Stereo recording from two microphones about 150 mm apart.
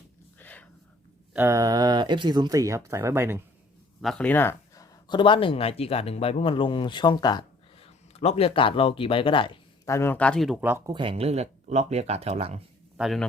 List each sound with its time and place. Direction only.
0.3 s a sound: 10° left (ahead or behind)
1.4 s speech: 20° right (ahead or behind)
4.0 s speech: 5° left (ahead or behind); by 7.4 s 30° left (ahead or behind)
7.8 s speech: 45° left (ahead or behind)
9.8 s speech: 20° left (ahead or behind); by 10.6 s centre (ahead or behind)
10.6 s speech: 15° right (ahead or behind)
10.8 s speech: 35° right (ahead or behind)
13.0 s a man's voice: centre (ahead or behind)